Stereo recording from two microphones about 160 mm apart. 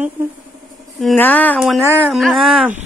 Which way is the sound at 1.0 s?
5° left (ahead or behind).